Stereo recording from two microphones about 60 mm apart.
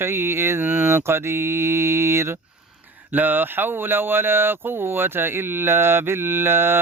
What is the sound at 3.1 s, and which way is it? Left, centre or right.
Speech, right.